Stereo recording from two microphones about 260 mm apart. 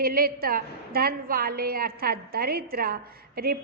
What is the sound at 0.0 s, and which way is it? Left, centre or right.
A woman's voice, right.